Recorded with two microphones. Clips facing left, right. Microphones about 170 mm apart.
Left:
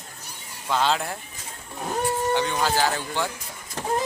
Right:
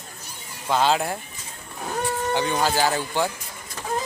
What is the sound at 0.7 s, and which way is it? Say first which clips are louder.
Speech: right 3 dB; 5° right (ahead or behind).